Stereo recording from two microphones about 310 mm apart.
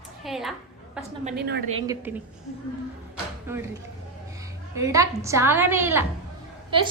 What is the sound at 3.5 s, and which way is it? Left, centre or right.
Speech, centre.